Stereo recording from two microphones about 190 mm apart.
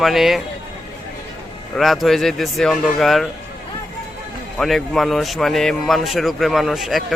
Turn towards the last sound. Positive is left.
turn(degrees=0)  # may be behind; listen again after turning